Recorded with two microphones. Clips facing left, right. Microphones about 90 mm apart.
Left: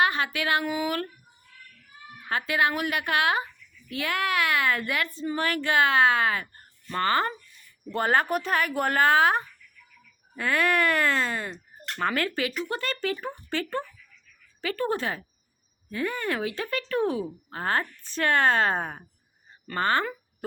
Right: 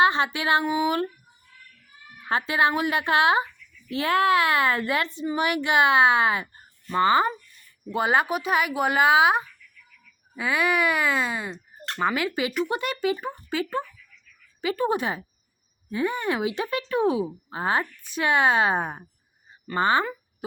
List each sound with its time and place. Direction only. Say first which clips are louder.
0.0 s speech: right 4 dB; 25° right (ahead or behind)
2.3 s speech: right 3 dB; 25° right (ahead or behind)
5.2 s speech: right 2 dB; 15° right (ahead or behind)